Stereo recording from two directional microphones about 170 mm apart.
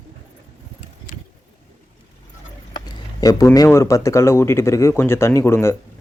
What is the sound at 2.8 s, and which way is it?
Speech, 25° left (ahead or behind).